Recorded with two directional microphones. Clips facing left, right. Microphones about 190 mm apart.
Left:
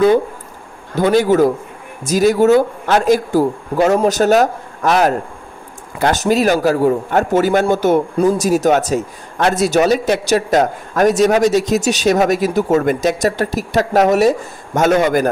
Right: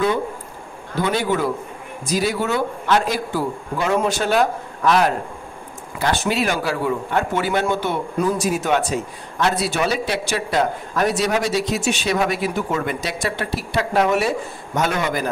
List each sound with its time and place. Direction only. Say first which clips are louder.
0.9 s a man's voice: left 8 dB; 45° left (ahead or behind)